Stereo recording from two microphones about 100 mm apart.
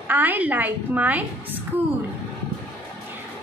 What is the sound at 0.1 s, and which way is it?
A woman's voice, 20° right (ahead or behind).